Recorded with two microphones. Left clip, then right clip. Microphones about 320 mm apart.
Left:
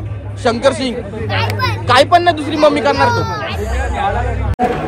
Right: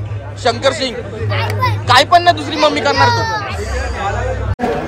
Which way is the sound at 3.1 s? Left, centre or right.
Centre.